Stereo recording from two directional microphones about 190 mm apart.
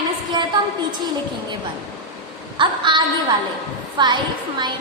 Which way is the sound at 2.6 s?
25° right (ahead or behind).